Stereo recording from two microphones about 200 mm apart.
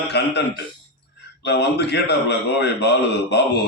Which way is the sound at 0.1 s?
55° left (ahead or behind).